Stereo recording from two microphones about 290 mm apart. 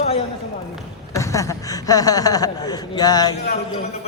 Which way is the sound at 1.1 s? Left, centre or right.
Centre.